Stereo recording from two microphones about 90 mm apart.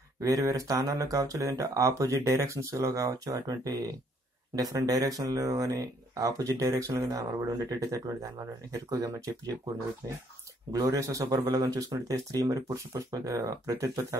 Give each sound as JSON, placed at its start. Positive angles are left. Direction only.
{"t": 0.2, "sound": "speech", "side_deg": -40}
{"t": 10.7, "sound": "speech", "side_deg": -35}